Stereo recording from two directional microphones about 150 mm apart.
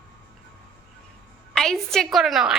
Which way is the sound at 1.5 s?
5° left (ahead or behind).